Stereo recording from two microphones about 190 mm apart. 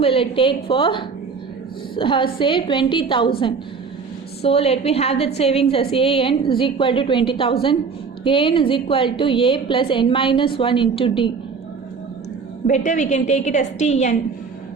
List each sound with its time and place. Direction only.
0.0 s a woman's voice: 30° left (ahead or behind)
4.4 s a woman's voice: 30° left (ahead or behind)
12.6 s a woman's voice: 40° left (ahead or behind)